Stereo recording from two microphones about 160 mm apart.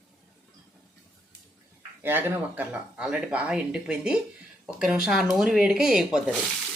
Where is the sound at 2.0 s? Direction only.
15° right (ahead or behind).